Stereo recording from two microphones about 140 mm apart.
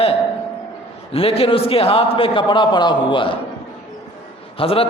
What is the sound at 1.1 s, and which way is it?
A man's voice, 40° left (ahead or behind).